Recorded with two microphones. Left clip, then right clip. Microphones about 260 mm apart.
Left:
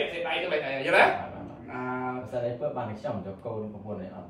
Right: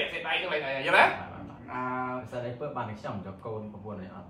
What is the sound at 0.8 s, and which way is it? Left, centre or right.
Speech, centre.